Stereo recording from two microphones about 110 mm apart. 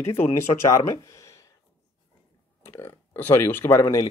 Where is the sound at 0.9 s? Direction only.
25° left (ahead or behind).